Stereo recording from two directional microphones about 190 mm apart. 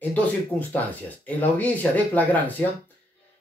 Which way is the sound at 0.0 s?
10° left (ahead or behind).